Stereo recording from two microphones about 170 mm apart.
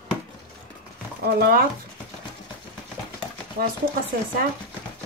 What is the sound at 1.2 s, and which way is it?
Speech, 65° right (ahead or behind).